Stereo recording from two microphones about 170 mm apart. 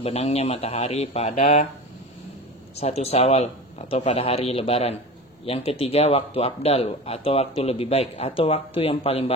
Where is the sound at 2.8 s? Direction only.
35° left (ahead or behind).